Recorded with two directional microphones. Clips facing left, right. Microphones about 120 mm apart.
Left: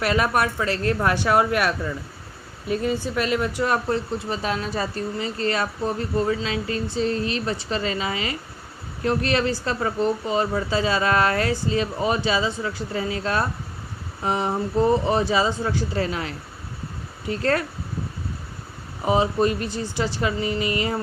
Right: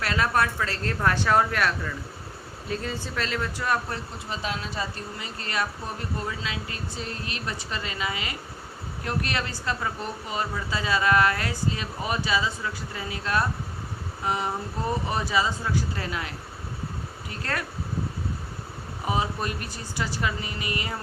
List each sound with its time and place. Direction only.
0.0 s a woman's voice: 20° left (ahead or behind)
4.3 s speech: 45° left (ahead or behind)
5.2 s speech: 30° left (ahead or behind)
19.0 s speech: 25° left (ahead or behind)